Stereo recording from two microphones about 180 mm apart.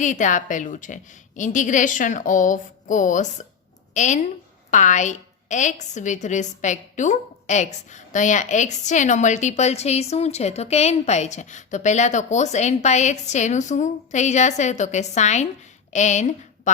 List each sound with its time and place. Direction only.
0.0 s a woman's voice: 45° left (ahead or behind)